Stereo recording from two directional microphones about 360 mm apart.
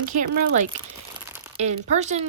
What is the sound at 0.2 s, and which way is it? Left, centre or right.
Speech, right.